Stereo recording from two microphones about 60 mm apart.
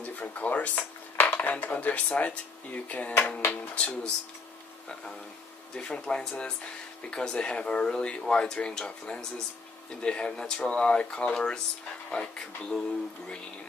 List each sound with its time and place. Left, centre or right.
0.0 s speech: left
5.8 s speech: centre